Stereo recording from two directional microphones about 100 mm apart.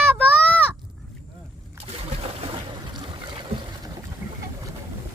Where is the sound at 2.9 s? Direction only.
45° right (ahead or behind).